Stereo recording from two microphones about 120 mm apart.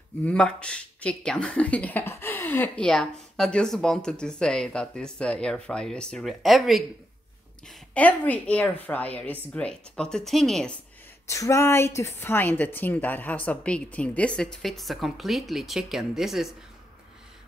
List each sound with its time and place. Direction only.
0.2 s speech: 10° left (ahead or behind)
7.6 s speech: 10° left (ahead or behind)
11.2 s speech: 25° left (ahead or behind); by 16.4 s 5° right (ahead or behind)